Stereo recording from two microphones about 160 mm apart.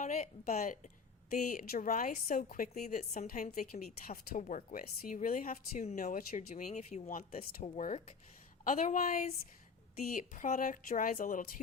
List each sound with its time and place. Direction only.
0.0 s speech: 50° left (ahead or behind)
1.5 s a woman's voice: 65° left (ahead or behind); by 3.1 s 45° left (ahead or behind)
3.1 s a woman's voice: 60° left (ahead or behind)
7.6 s speech: 45° left (ahead or behind)
8.6 s a woman's voice: 55° left (ahead or behind)
10.1 s a woman's voice: 55° left (ahead or behind)